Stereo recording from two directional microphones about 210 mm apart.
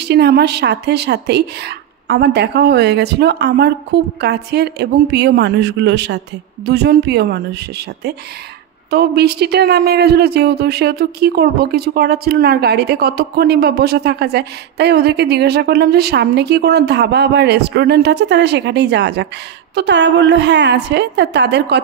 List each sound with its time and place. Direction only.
0.0 s a woman's voice: 55° right (ahead or behind)